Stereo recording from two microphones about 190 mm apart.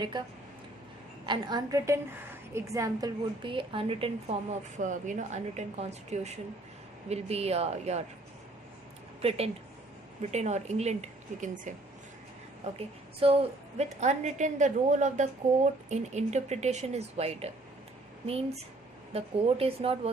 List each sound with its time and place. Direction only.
0.1 s a woman's voice: 25° right (ahead or behind)
4.8 s a woman's voice: 40° right (ahead or behind)
10.3 s a woman's voice: 35° right (ahead or behind)